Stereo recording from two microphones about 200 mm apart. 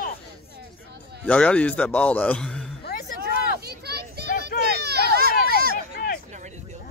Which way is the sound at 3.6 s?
55° right (ahead or behind).